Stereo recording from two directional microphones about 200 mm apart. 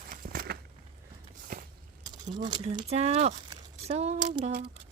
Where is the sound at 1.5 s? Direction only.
45° right (ahead or behind).